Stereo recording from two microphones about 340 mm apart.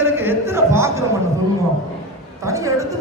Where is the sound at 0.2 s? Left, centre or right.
Centre.